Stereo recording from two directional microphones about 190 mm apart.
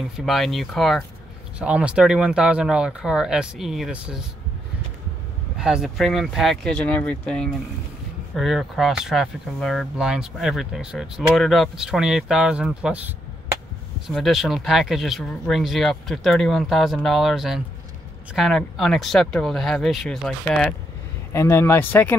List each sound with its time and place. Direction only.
0.2 s speech: centre (ahead or behind)
5.6 s speech: centre (ahead or behind)